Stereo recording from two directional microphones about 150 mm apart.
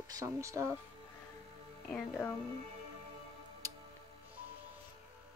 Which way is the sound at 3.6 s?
20° right (ahead or behind).